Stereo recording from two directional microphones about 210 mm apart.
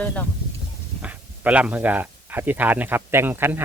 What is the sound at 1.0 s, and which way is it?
Speech, 5° right (ahead or behind).